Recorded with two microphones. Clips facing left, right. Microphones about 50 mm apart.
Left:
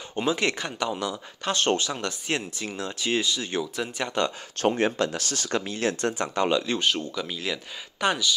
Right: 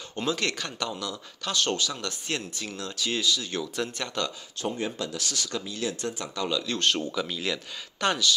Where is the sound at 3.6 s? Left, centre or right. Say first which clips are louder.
Even; centre.